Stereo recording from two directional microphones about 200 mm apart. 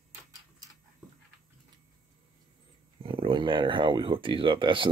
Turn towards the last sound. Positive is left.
turn(degrees=-25)  # may be behind; listen again after turning